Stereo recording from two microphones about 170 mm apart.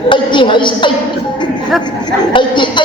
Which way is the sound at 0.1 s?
30° left (ahead or behind).